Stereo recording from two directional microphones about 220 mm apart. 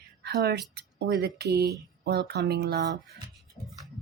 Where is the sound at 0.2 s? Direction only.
45° right (ahead or behind).